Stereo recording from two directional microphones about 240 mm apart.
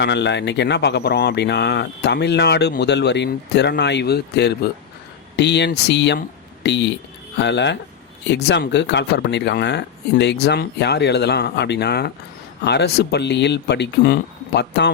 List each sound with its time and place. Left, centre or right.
0.0 s speech: left